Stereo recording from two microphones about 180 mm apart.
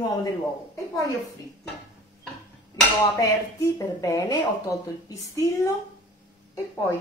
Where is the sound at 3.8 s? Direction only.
20° left (ahead or behind).